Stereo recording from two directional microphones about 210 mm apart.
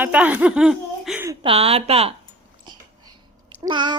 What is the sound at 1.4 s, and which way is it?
Speech, 25° right (ahead or behind).